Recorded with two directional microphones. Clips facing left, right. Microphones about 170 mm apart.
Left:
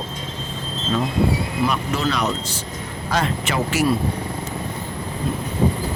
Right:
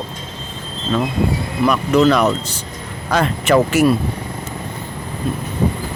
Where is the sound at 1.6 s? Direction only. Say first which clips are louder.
Right 11 dB; 65° right (ahead or behind).